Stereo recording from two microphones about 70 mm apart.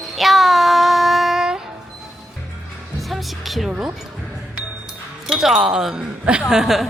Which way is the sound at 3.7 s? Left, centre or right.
Centre.